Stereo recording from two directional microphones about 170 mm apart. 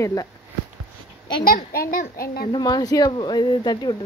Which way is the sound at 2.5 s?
25° left (ahead or behind).